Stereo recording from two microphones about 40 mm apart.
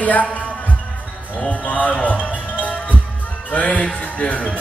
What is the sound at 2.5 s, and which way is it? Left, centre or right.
Music, left.